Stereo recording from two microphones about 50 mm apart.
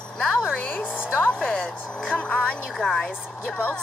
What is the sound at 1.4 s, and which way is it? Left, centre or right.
A woman's voice, centre.